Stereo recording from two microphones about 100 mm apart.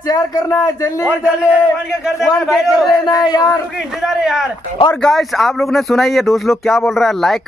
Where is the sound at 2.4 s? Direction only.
Centre (ahead or behind).